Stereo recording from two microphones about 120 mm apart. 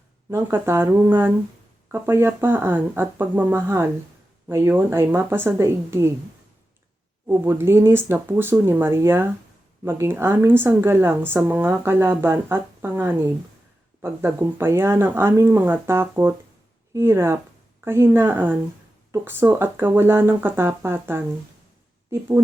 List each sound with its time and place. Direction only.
0.3 s speech: 20° right (ahead or behind)
7.3 s a woman's voice: 20° right (ahead or behind)